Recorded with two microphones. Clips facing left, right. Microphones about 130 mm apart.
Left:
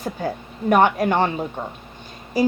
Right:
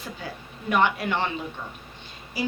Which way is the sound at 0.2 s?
45° left (ahead or behind).